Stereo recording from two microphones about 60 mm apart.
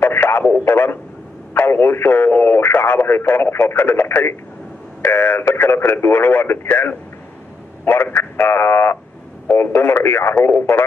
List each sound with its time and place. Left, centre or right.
0.0 s radio: left
1.5 s speech: left